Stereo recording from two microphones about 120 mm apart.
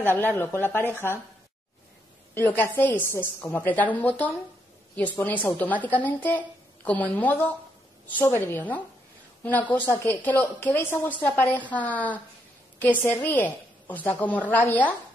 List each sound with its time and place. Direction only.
0.0 s a woman's voice: 15° left (ahead or behind)
2.3 s a woman's voice: 20° left (ahead or behind)